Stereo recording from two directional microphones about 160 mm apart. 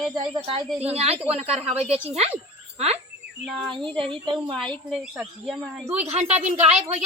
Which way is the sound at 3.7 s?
30° right (ahead or behind).